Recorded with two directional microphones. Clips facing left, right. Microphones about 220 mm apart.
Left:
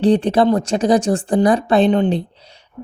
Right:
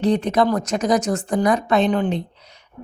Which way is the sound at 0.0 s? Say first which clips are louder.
Left 4 dB; 30° left (ahead or behind).